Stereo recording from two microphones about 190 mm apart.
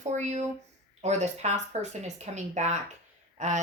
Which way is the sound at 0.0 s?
40° right (ahead or behind).